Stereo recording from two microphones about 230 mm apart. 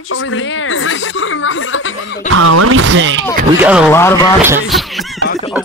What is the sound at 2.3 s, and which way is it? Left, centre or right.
Speech, right.